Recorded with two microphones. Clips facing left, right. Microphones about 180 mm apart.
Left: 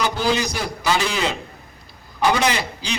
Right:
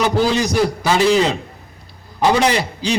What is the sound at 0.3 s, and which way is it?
A man's voice, 30° right (ahead or behind).